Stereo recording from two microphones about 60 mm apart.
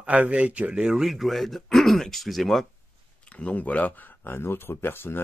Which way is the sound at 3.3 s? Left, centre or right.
Left.